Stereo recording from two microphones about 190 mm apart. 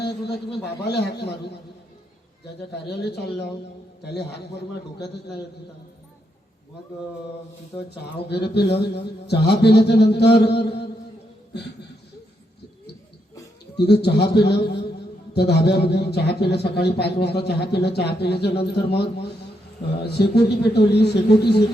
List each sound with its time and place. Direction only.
0.0 s a man's voice: 60° left (ahead or behind)
2.8 s a man's voice: 60° left (ahead or behind)
7.9 s a man's voice: 60° left (ahead or behind)
13.7 s a man's voice: 60° left (ahead or behind)